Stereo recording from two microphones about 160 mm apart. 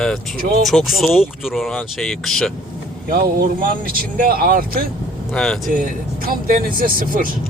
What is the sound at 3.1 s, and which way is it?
Speech, 65° right (ahead or behind).